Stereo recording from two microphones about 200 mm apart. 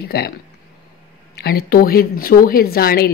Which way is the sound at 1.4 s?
50° left (ahead or behind).